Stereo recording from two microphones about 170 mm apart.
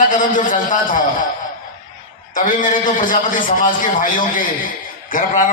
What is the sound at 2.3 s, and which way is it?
A man's voice, 50° left (ahead or behind).